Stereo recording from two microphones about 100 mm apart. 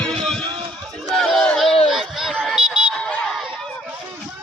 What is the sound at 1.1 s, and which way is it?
Crowd, centre (ahead or behind).